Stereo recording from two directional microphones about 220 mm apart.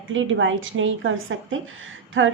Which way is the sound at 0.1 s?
60° right (ahead or behind).